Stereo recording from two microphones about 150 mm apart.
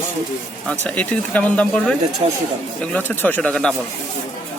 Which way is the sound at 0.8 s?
10° left (ahead or behind).